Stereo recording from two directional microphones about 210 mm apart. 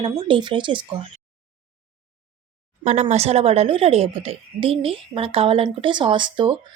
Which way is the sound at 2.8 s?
35° right (ahead or behind).